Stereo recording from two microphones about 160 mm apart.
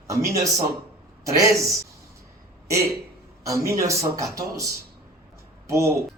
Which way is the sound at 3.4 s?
20° right (ahead or behind).